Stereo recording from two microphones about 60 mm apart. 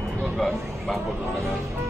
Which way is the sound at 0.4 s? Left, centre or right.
Centre.